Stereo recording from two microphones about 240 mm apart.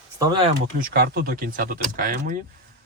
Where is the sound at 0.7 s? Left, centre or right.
Right.